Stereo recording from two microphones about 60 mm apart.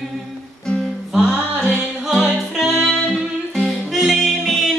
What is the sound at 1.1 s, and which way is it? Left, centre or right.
Music, centre.